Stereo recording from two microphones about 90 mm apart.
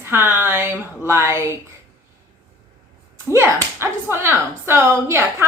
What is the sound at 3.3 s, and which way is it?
Speech, 30° right (ahead or behind).